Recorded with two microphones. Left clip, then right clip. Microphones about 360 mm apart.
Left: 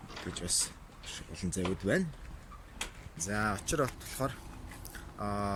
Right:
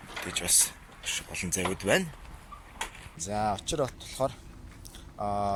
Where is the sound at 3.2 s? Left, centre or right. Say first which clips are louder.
Right 4 dB; centre.